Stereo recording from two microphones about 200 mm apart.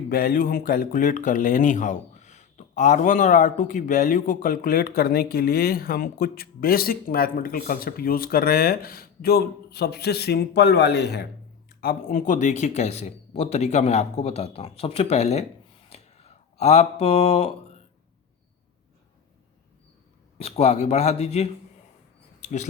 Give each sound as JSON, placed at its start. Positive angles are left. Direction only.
{"t": 0.1, "sound": "speech", "side_deg": 45}
{"t": 15.9, "sound": "a sound", "side_deg": 30}
{"t": 20.4, "sound": "speech", "side_deg": 30}